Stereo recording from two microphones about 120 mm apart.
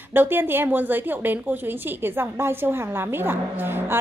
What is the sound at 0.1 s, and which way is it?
A woman's voice, 15° right (ahead or behind).